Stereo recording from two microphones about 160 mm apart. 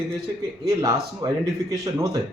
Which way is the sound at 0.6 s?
20° right (ahead or behind).